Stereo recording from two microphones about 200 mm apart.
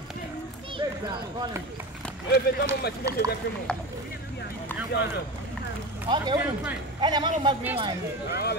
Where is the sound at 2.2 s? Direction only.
50° left (ahead or behind).